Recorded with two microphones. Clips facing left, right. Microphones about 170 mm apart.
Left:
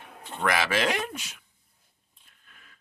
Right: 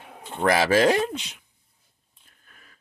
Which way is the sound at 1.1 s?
20° right (ahead or behind).